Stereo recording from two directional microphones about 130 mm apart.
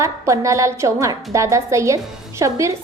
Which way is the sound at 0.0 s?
25° right (ahead or behind).